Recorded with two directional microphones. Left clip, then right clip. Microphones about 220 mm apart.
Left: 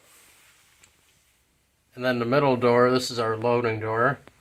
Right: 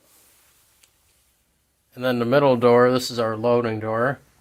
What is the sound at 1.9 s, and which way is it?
Speech, 55° right (ahead or behind).